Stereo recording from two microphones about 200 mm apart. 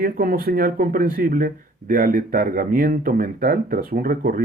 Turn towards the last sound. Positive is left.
turn(degrees=-45)  # may be behind; listen again after turning